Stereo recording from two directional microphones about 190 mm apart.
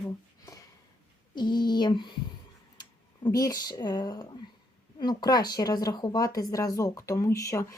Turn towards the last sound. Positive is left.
turn(degrees=15)  # may be behind; listen again after turning